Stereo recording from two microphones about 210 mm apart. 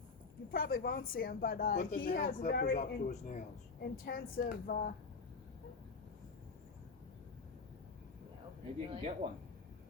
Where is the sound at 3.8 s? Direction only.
45° left (ahead or behind).